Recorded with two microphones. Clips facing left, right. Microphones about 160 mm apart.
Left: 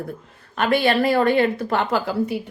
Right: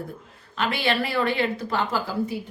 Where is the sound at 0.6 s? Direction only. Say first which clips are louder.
Left 6 dB; 50° left (ahead or behind).